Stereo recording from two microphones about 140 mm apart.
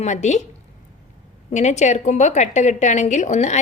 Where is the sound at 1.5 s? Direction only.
55° left (ahead or behind).